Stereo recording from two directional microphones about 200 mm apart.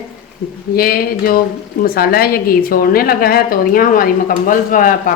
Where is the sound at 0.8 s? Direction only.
50° left (ahead or behind).